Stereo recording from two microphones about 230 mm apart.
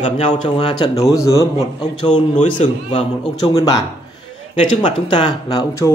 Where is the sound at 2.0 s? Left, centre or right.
Left.